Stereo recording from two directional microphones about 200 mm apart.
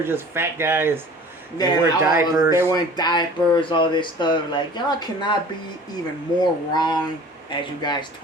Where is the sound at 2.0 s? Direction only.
10° right (ahead or behind).